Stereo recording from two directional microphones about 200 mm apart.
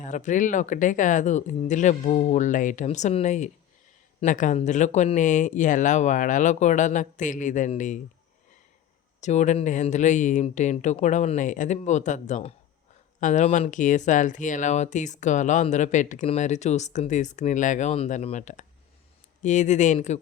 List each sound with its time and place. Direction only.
0.0 s speech: 40° left (ahead or behind)
9.2 s speech: 35° left (ahead or behind)